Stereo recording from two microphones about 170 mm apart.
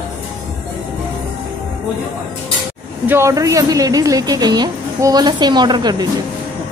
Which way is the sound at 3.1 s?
15° right (ahead or behind).